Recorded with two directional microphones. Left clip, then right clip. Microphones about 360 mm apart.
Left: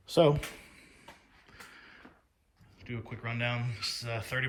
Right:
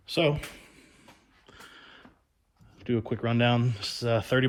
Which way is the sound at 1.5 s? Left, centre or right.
Right.